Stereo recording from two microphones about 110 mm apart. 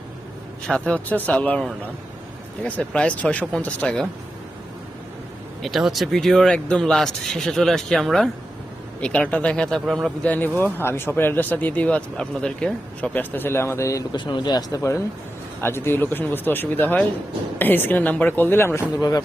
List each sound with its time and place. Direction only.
0.7 s speech: 10° left (ahead or behind)
2.6 s speech: 10° left (ahead or behind)
5.6 s speech: centre (ahead or behind)
10.2 s speech: 15° left (ahead or behind); by 14.8 s 40° left (ahead or behind)
14.8 s speech: 25° left (ahead or behind)
18.9 s speech: 35° left (ahead or behind)